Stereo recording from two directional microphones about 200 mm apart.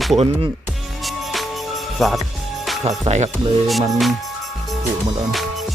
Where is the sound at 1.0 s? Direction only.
Centre (ahead or behind).